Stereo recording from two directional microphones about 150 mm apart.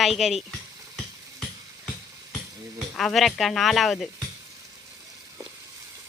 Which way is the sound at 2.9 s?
Centre (ahead or behind).